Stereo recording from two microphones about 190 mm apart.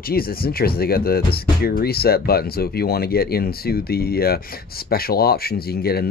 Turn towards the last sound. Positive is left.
turn(degrees=55)  # may be behind; listen again after turning